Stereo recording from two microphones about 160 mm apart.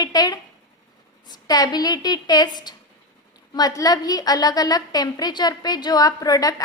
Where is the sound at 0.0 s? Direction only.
25° left (ahead or behind).